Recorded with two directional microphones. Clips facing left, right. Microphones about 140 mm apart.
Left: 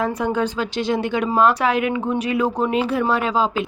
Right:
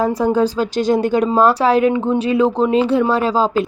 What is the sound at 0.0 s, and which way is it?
Speech, 35° right (ahead or behind).